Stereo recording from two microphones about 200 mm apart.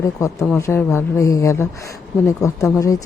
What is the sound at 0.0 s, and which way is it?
Speech, 15° left (ahead or behind).